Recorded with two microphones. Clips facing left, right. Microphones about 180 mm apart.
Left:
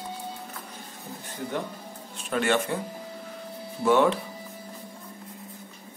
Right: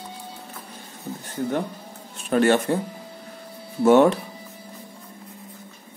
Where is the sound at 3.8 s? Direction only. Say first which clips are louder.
Right 6 dB; 45° right (ahead or behind).